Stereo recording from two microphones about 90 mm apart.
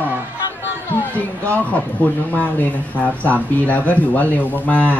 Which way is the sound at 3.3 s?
15° left (ahead or behind).